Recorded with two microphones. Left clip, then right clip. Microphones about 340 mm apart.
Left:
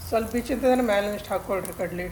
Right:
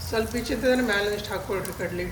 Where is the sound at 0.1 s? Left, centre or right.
Centre.